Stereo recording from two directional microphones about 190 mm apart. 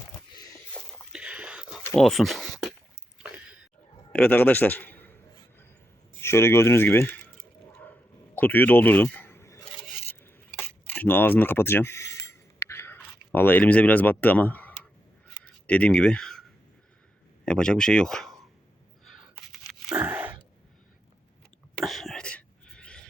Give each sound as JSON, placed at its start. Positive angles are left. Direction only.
{"t": 0.3, "sound": "a sound", "side_deg": 20}
{"t": 1.1, "sound": "whispering", "side_deg": -5}
{"t": 1.9, "sound": "speech", "side_deg": 0}
{"t": 4.1, "sound": "a man's voice", "side_deg": 5}
{"t": 6.2, "sound": "speech", "side_deg": 15}
{"t": 8.4, "sound": "speech", "side_deg": 10}
{"t": 10.2, "sound": "a sound", "side_deg": 10}
{"t": 15.6, "sound": "speech", "side_deg": 5}
{"t": 19.9, "sound": "a sound", "side_deg": -20}
{"t": 21.8, "sound": "whispering", "side_deg": 0}